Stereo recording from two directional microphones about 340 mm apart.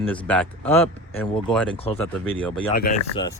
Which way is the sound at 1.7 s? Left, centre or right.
Centre.